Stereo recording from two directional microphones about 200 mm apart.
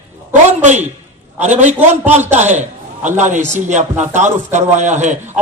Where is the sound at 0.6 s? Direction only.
35° right (ahead or behind).